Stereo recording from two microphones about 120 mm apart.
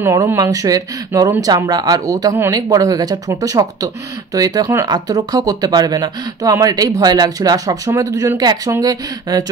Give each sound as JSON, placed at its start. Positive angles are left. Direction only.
{"t": 0.0, "sound": "speech", "side_deg": -25}